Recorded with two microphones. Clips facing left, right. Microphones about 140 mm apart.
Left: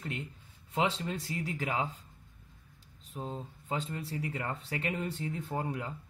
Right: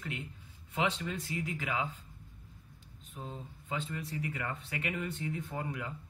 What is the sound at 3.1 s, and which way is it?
Speech, 35° left (ahead or behind).